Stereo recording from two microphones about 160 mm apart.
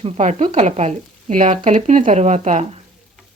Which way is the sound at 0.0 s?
45° right (ahead or behind).